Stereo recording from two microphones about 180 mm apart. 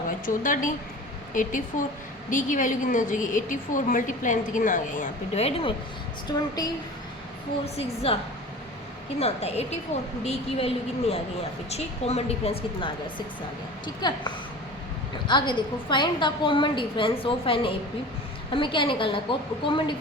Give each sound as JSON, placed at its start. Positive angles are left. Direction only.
{"t": 0.3, "sound": "a woman's voice", "side_deg": 45}
{"t": 6.3, "sound": "a woman's voice", "side_deg": 20}
{"t": 7.6, "sound": "a woman's voice", "side_deg": 35}